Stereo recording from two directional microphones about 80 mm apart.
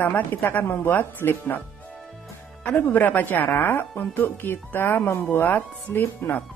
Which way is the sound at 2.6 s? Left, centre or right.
Left.